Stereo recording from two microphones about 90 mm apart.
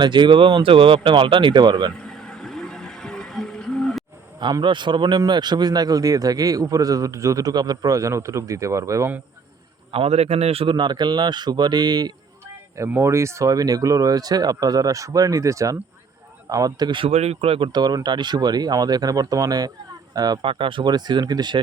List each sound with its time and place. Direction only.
0.0 s speech: 60° right (ahead or behind)
2.2 s music: 5° left (ahead or behind)
4.6 s a man's voice: 60° right (ahead or behind); by 9.0 s 35° right (ahead or behind)
9.9 s a man's voice: 90° right
10.5 s speech: 80° right; by 12.1 s 50° right (ahead or behind)
12.9 s a man's voice: 30° right (ahead or behind); by 17.0 s 50° right (ahead or behind)
17.0 s speech: 85° right
17.7 s speech: 50° right (ahead or behind)
20.4 s speech: 80° right; by 21.6 s 50° right (ahead or behind)